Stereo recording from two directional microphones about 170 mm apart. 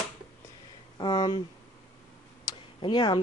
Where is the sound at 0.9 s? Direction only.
25° left (ahead or behind).